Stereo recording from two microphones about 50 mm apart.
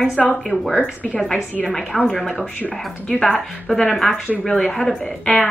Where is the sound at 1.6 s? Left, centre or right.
Centre.